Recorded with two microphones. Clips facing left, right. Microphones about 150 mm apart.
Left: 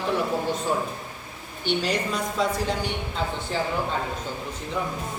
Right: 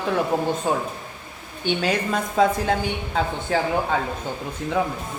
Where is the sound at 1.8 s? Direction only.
50° right (ahead or behind).